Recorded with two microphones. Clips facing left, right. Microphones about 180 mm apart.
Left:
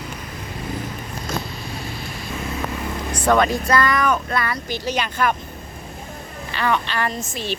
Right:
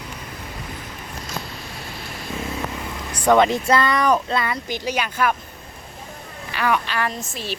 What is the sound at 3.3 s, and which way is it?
Speech, 20° right (ahead or behind).